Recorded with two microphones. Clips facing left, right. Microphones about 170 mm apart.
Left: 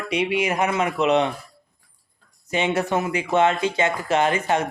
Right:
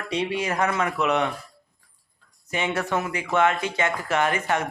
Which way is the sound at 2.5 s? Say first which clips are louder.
Left 4 dB; 25° left (ahead or behind).